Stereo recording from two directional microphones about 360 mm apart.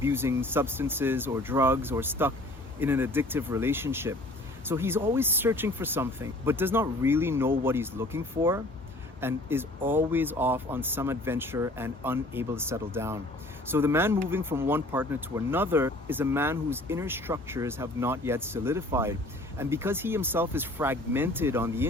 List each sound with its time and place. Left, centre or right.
0.0 s speech: centre